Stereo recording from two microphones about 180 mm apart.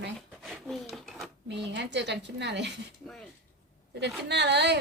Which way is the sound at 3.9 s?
70° right (ahead or behind).